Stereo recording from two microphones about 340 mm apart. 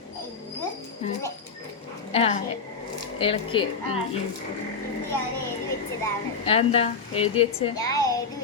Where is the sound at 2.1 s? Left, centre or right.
Centre.